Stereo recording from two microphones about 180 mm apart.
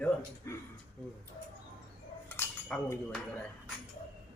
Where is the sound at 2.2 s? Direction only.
10° left (ahead or behind).